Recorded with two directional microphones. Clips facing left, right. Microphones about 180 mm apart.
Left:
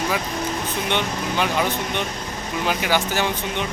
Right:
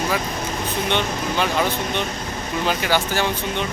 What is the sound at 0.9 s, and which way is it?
Speech, 15° left (ahead or behind).